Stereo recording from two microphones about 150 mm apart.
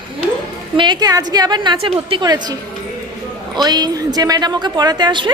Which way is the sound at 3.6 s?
25° right (ahead or behind).